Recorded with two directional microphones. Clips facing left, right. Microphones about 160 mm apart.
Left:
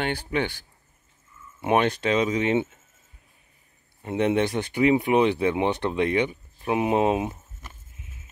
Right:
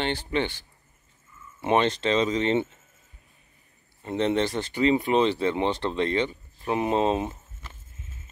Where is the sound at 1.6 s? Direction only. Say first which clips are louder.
Left 1 dB; 10° left (ahead or behind).